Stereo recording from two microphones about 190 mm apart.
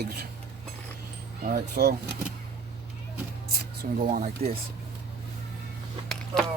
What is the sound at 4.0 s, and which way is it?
Speech, 40° right (ahead or behind).